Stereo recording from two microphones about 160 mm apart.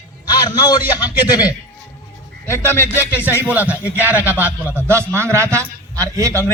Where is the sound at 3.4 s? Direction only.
10° right (ahead or behind).